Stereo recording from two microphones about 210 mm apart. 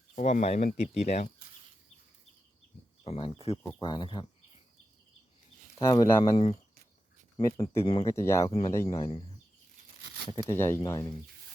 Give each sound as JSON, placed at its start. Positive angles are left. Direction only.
{"t": 0.2, "sound": "speech", "side_deg": 30}
{"t": 3.0, "sound": "speech", "side_deg": 25}
{"t": 5.8, "sound": "speech", "side_deg": 15}
{"t": 10.5, "sound": "speech", "side_deg": 10}